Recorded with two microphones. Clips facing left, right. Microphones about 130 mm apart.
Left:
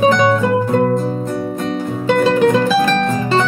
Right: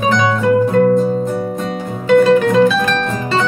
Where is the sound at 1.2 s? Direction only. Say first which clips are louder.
Right 1 dB; centre (ahead or behind).